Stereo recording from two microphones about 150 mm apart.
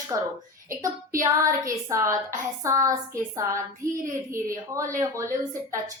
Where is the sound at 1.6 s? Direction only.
20° right (ahead or behind).